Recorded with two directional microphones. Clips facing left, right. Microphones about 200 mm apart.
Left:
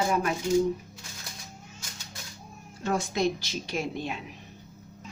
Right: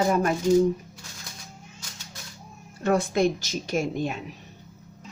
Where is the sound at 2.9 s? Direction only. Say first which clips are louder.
Right 5 dB; 55° right (ahead or behind).